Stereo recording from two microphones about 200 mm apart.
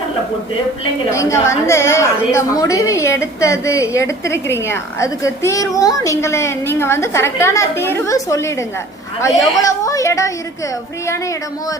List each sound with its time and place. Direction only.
1.1 s a woman's voice: 15° left (ahead or behind)